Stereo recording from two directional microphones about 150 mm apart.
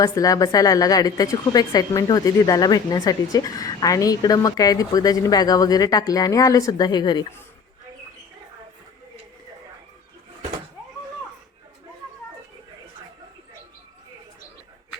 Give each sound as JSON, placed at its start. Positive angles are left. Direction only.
{"t": 0.0, "sound": "a woman's voice", "side_deg": 25}